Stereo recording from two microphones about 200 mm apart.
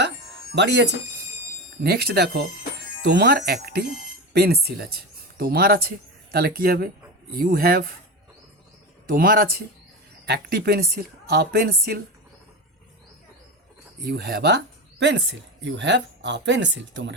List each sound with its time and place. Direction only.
0.5 s speech: 60° right (ahead or behind)
9.0 s speech: 45° right (ahead or behind)
14.1 s speech: 50° right (ahead or behind)